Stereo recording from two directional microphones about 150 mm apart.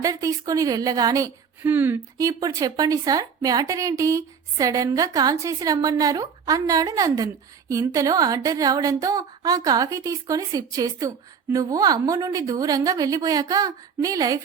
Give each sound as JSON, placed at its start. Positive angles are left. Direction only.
{"t": 0.0, "sound": "a woman's voice", "side_deg": -20}